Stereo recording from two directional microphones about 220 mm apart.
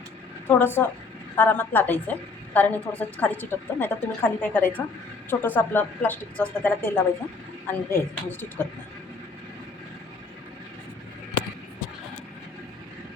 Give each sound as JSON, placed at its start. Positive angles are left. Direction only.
{"t": 0.4, "sound": "a woman's voice", "side_deg": 10}